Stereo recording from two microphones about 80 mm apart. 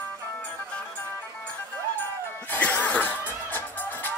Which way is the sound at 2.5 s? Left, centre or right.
Left.